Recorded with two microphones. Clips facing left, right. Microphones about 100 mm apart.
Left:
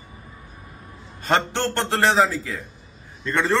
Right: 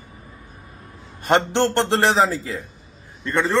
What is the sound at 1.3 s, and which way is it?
A man's voice, 20° right (ahead or behind).